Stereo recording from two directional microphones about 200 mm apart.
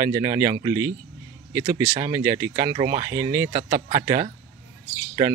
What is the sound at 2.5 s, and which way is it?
Speech, 25° right (ahead or behind).